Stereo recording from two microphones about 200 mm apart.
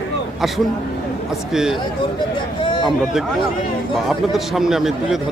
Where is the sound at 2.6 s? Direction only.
25° left (ahead or behind).